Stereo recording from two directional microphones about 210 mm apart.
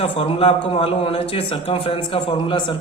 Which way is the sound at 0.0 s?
25° left (ahead or behind).